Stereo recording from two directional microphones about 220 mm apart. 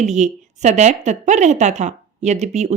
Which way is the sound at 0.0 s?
30° right (ahead or behind).